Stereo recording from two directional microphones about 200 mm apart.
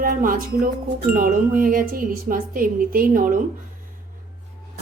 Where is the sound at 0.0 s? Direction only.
45° right (ahead or behind).